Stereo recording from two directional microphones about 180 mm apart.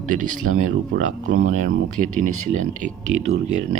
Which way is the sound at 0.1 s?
45° right (ahead or behind).